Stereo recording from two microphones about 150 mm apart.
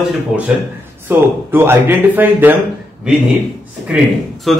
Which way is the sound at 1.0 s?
15° right (ahead or behind).